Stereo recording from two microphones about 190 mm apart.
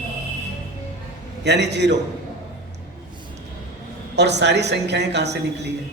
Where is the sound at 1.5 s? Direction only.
65° right (ahead or behind).